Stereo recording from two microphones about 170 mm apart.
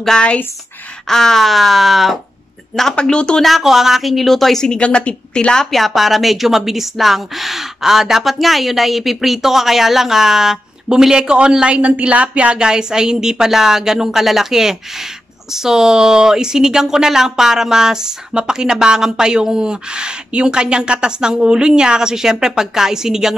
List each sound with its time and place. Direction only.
0.0 s speech: 5° left (ahead or behind)